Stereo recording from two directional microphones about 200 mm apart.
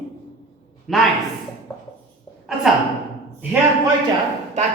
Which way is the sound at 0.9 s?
Centre (ahead or behind).